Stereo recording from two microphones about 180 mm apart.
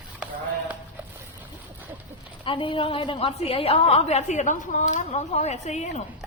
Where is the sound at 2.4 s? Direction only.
30° left (ahead or behind).